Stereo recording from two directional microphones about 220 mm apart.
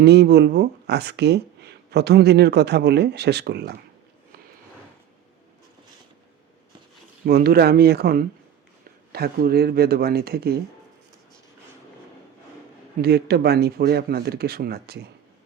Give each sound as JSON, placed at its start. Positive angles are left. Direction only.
{"t": 0.0, "sound": "speech", "side_deg": -50}
{"t": 7.3, "sound": "speech", "side_deg": -45}
{"t": 13.0, "sound": "speech", "side_deg": -45}